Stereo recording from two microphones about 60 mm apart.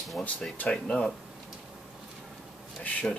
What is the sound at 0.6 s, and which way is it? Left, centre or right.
Speech, centre.